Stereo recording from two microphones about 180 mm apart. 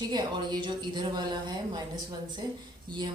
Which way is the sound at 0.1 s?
25° right (ahead or behind).